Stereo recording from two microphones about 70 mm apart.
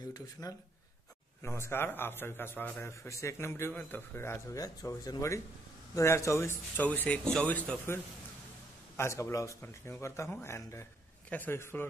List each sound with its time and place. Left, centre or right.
0.1 s speech: left
1.4 s a man's voice: left
2.8 s a man's voice: left
4.6 s speech: left
6.8 s speech: left
8.9 s speech: left
9.6 s a man's voice: left
11.2 s a man's voice: left
11.5 s a man's voice: left